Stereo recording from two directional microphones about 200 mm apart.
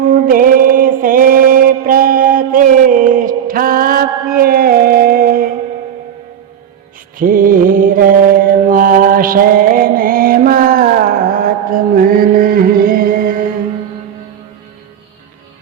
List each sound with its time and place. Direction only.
0.0 s mantra: 40° right (ahead or behind)
7.2 s mantra: 45° right (ahead or behind)